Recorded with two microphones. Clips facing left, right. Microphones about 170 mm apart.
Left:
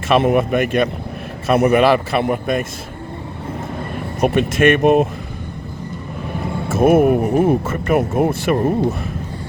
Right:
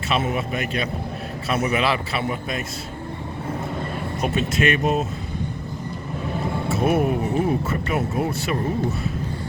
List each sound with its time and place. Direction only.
0.1 s speech: 55° left (ahead or behind)
4.2 s speech: 55° left (ahead or behind)
6.7 s speech: 50° left (ahead or behind)